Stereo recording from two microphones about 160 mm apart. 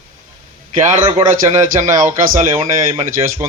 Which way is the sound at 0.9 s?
45° right (ahead or behind).